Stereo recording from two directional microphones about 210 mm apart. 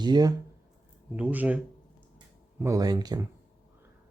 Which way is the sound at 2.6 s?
15° right (ahead or behind).